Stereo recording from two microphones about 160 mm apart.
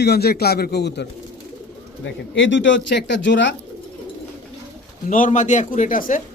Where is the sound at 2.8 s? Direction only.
90° left.